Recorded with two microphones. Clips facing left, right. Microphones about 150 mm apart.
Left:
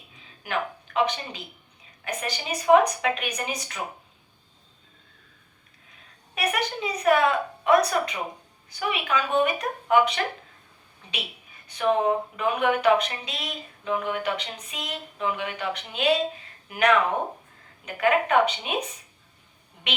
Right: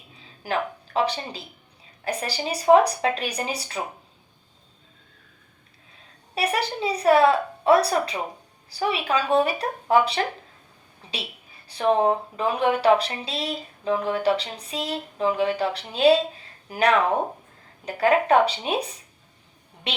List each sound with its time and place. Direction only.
0.9 s speech: 35° right (ahead or behind)
6.3 s speech: 30° right (ahead or behind)